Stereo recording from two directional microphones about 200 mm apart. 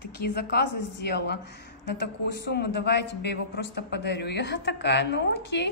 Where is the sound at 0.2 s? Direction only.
50° left (ahead or behind).